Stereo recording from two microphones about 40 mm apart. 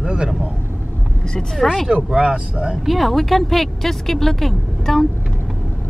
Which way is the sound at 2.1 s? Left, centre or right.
Right.